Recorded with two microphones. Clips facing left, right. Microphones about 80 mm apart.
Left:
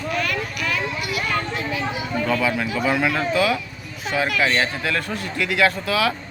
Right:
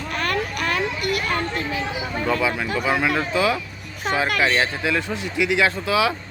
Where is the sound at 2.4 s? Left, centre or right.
Centre.